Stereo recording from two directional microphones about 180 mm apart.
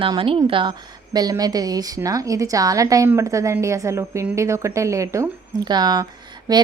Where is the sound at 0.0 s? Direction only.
30° right (ahead or behind).